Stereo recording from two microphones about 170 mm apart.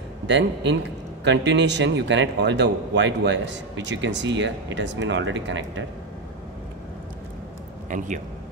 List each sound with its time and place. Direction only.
0.3 s a man's voice: 90° right
7.9 s a man's voice: 50° right (ahead or behind)